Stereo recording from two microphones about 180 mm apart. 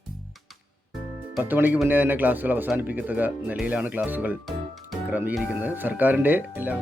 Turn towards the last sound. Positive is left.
turn(degrees=-10)  # may be behind; listen again after turning